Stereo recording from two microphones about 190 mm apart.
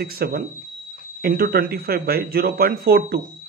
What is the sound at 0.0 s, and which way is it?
Speech, 55° right (ahead or behind).